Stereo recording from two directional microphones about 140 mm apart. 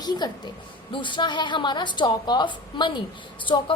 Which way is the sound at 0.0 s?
30° left (ahead or behind).